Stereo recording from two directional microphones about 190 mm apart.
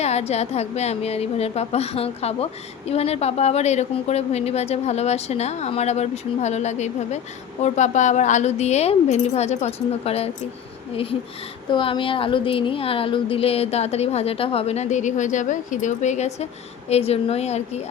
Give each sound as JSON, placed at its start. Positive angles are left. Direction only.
{"t": 0.0, "sound": "a woman's voice", "side_deg": 35}